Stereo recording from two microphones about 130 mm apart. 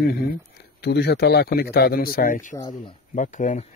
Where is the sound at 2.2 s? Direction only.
90° left.